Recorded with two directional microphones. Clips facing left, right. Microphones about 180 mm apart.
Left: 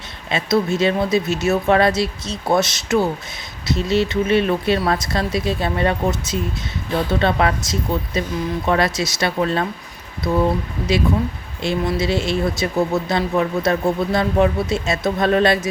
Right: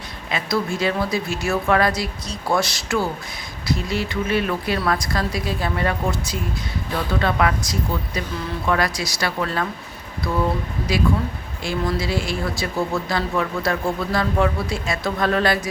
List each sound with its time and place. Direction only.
0.3 s speech: 25° left (ahead or behind)
11.6 s speech: 20° left (ahead or behind)